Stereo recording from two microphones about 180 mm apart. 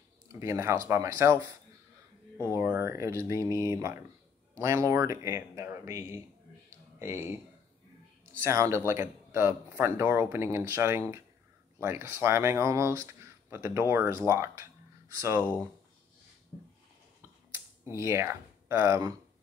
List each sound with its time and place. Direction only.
0.3 s speech: 15° right (ahead or behind)
8.3 s speech: 15° right (ahead or behind)
17.9 s speech: 15° right (ahead or behind)